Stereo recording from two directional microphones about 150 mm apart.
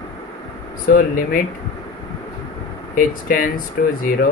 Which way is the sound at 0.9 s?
65° left (ahead or behind).